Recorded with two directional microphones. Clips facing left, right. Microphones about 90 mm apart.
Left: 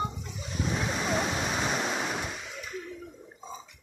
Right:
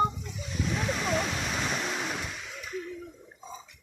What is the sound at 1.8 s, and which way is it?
Waves, 15° left (ahead or behind).